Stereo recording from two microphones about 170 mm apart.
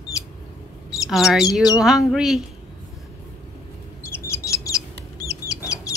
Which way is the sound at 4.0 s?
15° left (ahead or behind).